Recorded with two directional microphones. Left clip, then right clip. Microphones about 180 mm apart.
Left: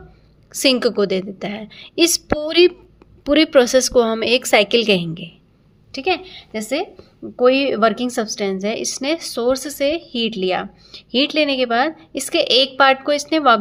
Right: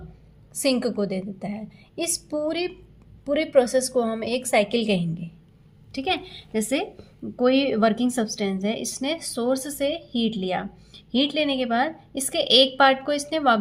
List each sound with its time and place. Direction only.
0.5 s a woman's voice: 40° left (ahead or behind)